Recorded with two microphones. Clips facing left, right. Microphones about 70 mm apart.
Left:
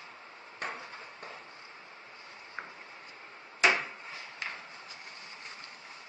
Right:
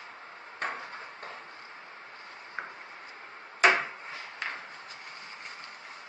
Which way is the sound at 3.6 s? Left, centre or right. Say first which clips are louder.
Right 3 dB; right.